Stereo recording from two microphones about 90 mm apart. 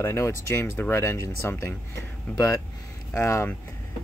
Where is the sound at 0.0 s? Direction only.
30° left (ahead or behind).